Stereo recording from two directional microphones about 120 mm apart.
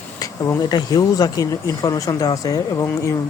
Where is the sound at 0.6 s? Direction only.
35° left (ahead or behind).